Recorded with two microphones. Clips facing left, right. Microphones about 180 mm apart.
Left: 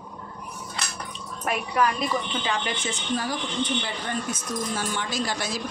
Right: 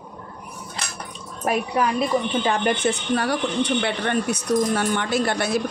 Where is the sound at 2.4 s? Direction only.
55° right (ahead or behind).